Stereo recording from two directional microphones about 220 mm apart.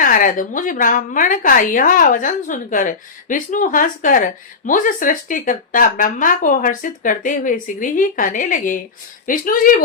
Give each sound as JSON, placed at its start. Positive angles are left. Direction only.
{"t": 0.0, "sound": "a woman's voice", "side_deg": 35}